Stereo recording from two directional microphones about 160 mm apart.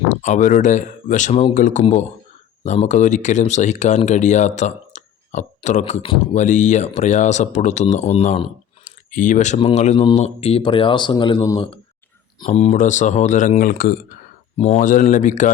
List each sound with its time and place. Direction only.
0.1 s speech: 50° left (ahead or behind)
8.8 s a sound: 50° left (ahead or behind)
9.6 s speech: 40° left (ahead or behind)
12.5 s speech: 45° left (ahead or behind); by 13.9 s 65° left (ahead or behind)
14.6 s speech: 50° left (ahead or behind)